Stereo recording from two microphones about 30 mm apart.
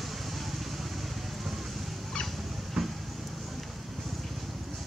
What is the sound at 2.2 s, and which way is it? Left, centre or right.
Vehicle, centre.